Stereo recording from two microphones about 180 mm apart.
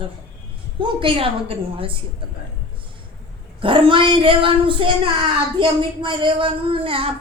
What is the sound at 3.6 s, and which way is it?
Speech, 30° right (ahead or behind).